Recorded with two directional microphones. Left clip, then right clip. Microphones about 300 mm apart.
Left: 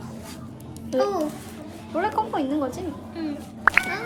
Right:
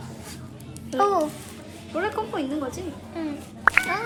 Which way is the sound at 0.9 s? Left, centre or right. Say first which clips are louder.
Right 2 dB; centre.